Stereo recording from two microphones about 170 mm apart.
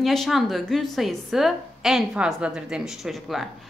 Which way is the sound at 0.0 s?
Centre (ahead or behind).